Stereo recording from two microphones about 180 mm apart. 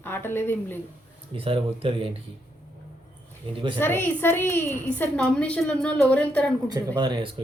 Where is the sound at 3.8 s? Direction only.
10° left (ahead or behind).